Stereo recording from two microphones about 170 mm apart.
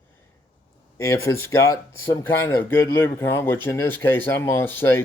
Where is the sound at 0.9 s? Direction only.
20° left (ahead or behind).